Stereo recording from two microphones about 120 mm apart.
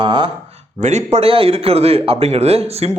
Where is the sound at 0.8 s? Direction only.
75° right (ahead or behind).